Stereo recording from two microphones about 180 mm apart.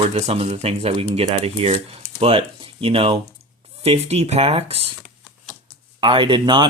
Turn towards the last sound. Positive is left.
turn(degrees=-25)  # may be behind; listen again after turning